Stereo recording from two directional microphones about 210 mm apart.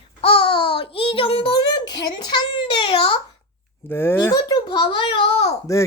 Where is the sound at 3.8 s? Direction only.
10° left (ahead or behind); by 5.6 s 25° left (ahead or behind).